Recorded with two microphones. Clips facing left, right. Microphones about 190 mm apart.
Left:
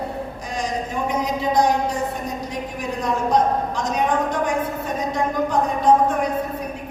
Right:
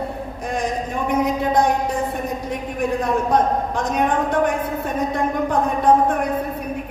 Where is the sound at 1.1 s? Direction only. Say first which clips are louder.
Right 3 dB; 55° right (ahead or behind).